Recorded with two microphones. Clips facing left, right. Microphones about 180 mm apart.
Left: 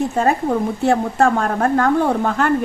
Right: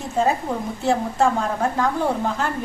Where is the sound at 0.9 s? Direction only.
60° left (ahead or behind).